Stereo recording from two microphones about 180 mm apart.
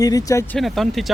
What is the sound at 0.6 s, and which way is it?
Speech, centre (ahead or behind).